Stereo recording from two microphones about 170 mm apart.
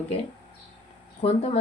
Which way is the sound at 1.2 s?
35° left (ahead or behind).